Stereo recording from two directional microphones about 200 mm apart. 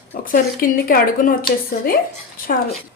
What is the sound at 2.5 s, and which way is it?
Speech, 45° left (ahead or behind).